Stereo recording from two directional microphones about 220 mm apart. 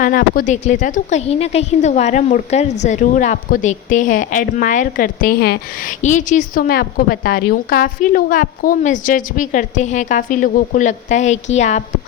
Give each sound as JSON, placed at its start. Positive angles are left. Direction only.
{"t": 0.0, "sound": "a woman's voice", "side_deg": 40}